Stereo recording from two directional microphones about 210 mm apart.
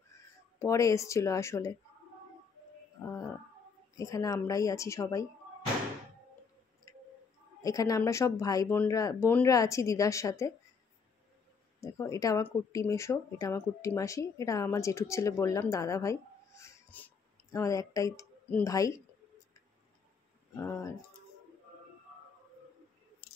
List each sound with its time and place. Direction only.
0.6 s speech: 15° left (ahead or behind)
3.9 s speech: 15° left (ahead or behind)
6.9 s tick: 15° left (ahead or behind)
7.6 s speech: 15° left (ahead or behind)
11.8 s speech: 15° left (ahead or behind)
20.5 s speech: 15° left (ahead or behind)